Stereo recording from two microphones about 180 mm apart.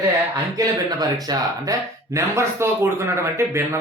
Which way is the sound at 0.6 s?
20° right (ahead or behind).